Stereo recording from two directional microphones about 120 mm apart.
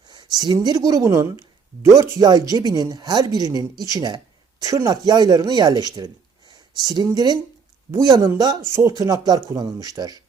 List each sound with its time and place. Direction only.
0.1 s speech: 35° right (ahead or behind)
8.9 s speech: 30° right (ahead or behind)